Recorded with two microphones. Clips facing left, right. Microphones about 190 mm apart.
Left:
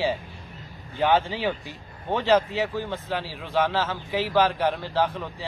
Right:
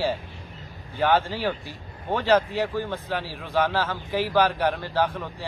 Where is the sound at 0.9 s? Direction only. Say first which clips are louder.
Even; 5° left (ahead or behind).